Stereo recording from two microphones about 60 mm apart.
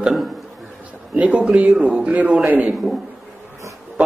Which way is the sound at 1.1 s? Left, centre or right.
Right.